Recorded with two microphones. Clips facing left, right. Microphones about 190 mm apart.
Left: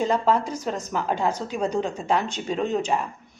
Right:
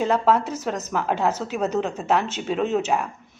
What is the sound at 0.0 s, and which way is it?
Speech, 5° right (ahead or behind).